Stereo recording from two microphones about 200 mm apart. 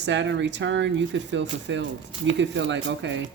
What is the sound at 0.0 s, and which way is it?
Speech, 65° right (ahead or behind).